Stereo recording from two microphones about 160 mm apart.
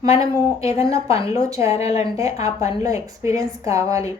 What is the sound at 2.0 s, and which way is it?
Speech, 20° right (ahead or behind).